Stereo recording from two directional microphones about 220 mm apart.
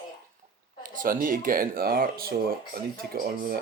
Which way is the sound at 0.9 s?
40° right (ahead or behind).